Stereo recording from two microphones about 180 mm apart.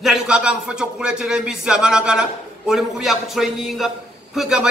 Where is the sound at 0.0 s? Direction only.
5° right (ahead or behind).